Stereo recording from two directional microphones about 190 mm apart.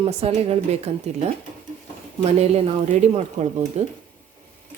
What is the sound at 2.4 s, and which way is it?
Speech, 35° right (ahead or behind).